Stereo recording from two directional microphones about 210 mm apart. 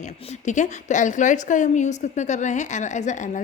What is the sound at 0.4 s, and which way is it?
A woman's voice, 35° left (ahead or behind).